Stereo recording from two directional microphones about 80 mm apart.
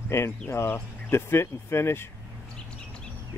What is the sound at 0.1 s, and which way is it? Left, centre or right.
Speech, left.